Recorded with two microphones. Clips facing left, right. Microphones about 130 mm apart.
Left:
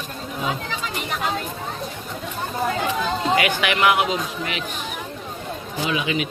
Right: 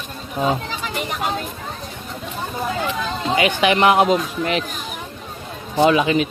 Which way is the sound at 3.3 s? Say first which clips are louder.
Right 6 dB; 25° right (ahead or behind).